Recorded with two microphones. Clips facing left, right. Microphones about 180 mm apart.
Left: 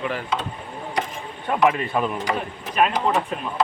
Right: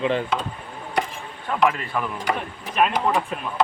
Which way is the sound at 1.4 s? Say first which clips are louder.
Left 2 dB; 20° left (ahead or behind).